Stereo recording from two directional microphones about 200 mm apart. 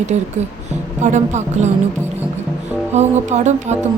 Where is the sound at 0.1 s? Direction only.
35° right (ahead or behind).